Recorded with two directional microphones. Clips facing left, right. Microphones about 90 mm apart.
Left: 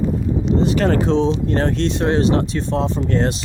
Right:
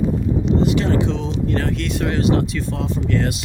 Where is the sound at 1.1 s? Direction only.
30° left (ahead or behind).